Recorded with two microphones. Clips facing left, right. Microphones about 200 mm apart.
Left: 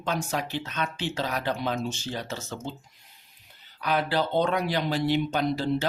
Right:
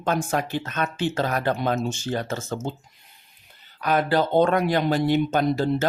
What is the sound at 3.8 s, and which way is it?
Speech, 45° right (ahead or behind).